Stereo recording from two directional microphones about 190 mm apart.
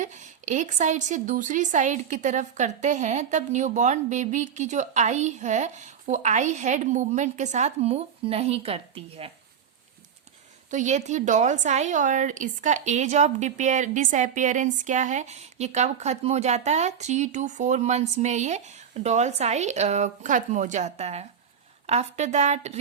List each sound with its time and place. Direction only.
0.0 s a woman's voice: 40° right (ahead or behind)
10.7 s a woman's voice: 40° right (ahead or behind)